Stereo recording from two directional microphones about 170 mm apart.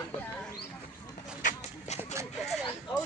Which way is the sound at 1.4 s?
50° left (ahead or behind).